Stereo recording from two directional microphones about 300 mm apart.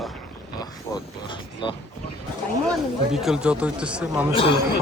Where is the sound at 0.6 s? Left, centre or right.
Centre.